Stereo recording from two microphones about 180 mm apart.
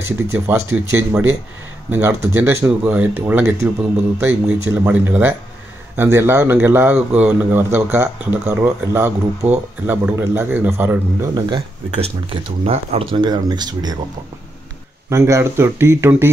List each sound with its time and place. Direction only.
0.3 s a man's voice: 15° right (ahead or behind)
9.4 s speech: 40° right (ahead or behind)
9.8 s a man's voice: 10° right (ahead or behind)
11.5 s speech: 30° right (ahead or behind)
15.0 s a man's voice: 15° right (ahead or behind)